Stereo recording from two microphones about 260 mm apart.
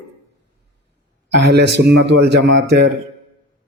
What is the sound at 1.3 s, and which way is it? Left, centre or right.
Speech, right.